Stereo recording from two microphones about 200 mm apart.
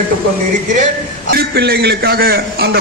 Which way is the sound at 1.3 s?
50° right (ahead or behind).